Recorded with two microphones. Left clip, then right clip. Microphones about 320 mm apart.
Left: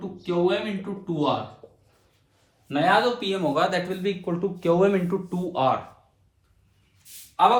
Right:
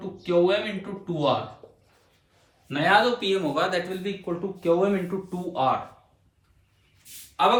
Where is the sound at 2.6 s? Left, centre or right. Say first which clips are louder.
Even; centre; by 5.6 s left.